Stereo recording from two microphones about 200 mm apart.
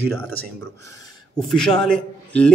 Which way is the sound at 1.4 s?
Centre (ahead or behind).